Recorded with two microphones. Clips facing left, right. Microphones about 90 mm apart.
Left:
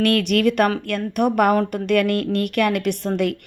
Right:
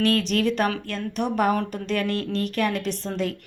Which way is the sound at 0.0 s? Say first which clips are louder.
Left 4 dB; 60° left (ahead or behind).